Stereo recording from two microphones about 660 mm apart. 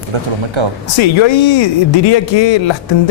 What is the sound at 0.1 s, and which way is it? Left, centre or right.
Speech, right.